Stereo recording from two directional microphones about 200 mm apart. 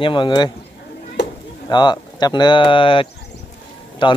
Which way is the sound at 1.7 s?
20° left (ahead or behind).